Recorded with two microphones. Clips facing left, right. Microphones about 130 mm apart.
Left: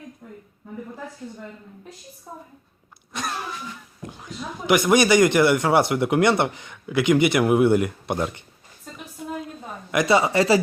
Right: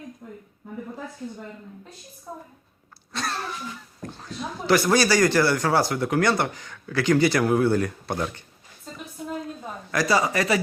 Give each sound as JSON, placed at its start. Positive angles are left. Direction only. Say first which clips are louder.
{"t": 3.1, "sound": "a sound", "louder": "even", "side_deg": 15}
{"t": 4.0, "sound": "a man's voice", "louder": "right 1 dB", "side_deg": 15}
{"t": 9.9, "sound": "a man's voice", "louder": "left 3 dB", "side_deg": 20}